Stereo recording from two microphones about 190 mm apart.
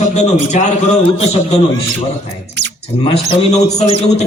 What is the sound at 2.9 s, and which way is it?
A man's voice, 30° left (ahead or behind).